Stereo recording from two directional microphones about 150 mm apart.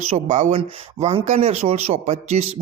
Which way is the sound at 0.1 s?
50° right (ahead or behind).